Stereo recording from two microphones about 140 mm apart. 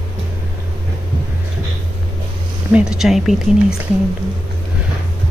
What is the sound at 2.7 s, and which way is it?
Speech, 5° right (ahead or behind).